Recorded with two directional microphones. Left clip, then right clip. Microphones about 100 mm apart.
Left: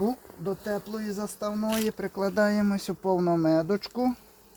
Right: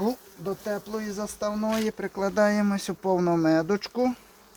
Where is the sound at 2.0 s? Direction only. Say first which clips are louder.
Right 3 dB; 10° left (ahead or behind).